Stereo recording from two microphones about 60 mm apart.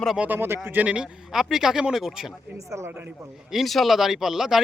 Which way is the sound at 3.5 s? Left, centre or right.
Centre.